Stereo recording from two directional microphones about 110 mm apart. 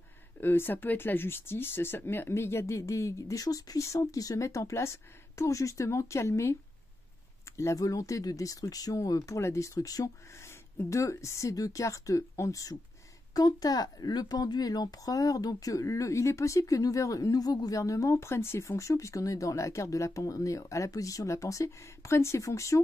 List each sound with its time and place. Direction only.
0.4 s speech: 20° left (ahead or behind)